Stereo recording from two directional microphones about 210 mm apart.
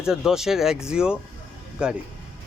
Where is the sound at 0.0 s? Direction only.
5° right (ahead or behind).